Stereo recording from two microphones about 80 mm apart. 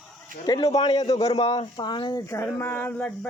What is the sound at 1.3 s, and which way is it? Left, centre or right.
Speech, left.